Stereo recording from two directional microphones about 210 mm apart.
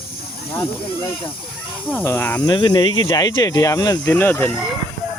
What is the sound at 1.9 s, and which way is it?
Speech, 10° left (ahead or behind).